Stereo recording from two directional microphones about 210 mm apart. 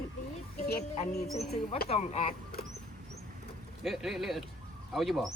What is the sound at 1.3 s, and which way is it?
Speech, centre (ahead or behind).